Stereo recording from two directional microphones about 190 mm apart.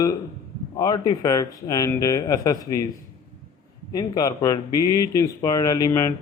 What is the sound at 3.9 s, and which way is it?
Speech, 20° left (ahead or behind).